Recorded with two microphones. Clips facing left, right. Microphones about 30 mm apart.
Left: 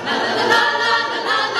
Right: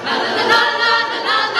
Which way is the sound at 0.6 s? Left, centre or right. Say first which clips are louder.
Right 2 dB; right.